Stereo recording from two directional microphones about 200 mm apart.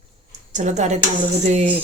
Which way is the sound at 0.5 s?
35° right (ahead or behind).